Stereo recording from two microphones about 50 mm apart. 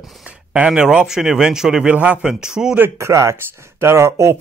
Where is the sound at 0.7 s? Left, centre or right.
Centre.